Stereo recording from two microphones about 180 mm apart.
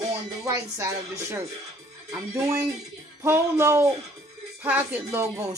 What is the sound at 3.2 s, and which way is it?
Speech, 15° right (ahead or behind).